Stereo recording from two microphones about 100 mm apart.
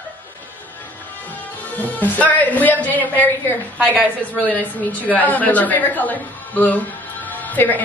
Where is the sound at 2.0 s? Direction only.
15° left (ahead or behind).